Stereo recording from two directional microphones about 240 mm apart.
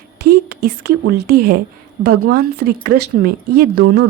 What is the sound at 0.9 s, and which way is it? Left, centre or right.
A woman's voice, right.